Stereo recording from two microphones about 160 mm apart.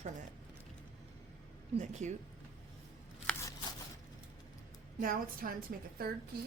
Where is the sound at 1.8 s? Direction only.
50° right (ahead or behind).